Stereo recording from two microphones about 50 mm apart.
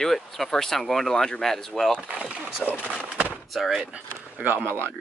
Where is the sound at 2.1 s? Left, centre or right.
Right.